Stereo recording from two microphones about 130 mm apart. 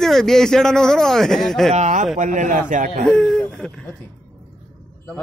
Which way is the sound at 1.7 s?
70° right (ahead or behind).